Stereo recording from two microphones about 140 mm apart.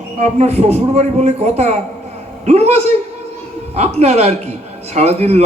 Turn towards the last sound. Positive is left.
turn(degrees=-50)  # may be behind; listen again after turning